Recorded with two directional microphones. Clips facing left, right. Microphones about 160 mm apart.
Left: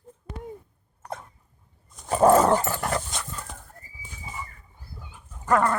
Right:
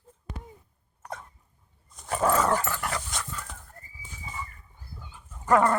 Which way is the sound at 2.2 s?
35° left (ahead or behind).